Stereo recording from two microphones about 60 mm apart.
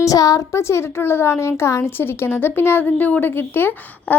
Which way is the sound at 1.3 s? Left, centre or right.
Left.